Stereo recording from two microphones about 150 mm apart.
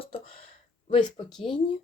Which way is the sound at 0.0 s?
40° left (ahead or behind).